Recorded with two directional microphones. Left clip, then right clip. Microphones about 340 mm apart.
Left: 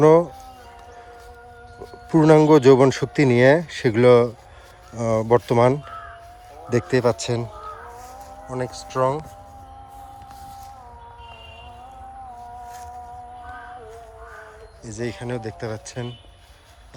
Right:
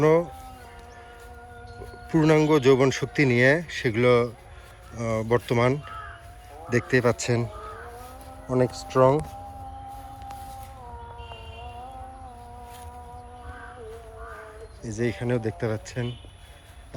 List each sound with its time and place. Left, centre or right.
0.0 s speech: centre
2.0 s speech: centre
14.8 s speech: centre